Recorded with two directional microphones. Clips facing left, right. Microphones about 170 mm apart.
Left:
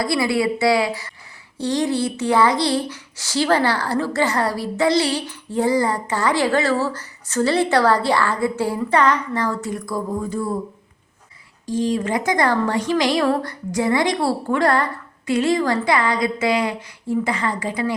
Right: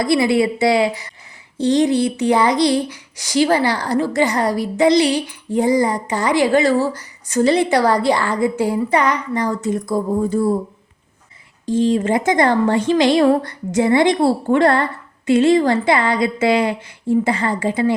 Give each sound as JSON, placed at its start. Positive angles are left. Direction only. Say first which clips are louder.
{"t": 0.0, "sound": "a woman's voice", "louder": "right 4 dB", "side_deg": -20}
{"t": 11.6, "sound": "a woman's voice", "louder": "right 5 dB", "side_deg": -25}